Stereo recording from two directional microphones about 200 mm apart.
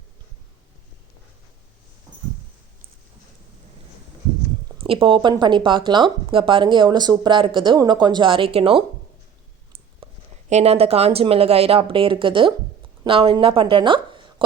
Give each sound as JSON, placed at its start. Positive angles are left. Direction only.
{"t": 4.8, "sound": "speech", "side_deg": -30}
{"t": 10.0, "sound": "a sound", "side_deg": -30}
{"t": 10.5, "sound": "a woman's voice", "side_deg": -30}